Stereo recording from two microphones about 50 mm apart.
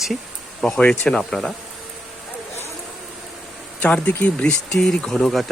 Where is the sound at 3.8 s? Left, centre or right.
Left.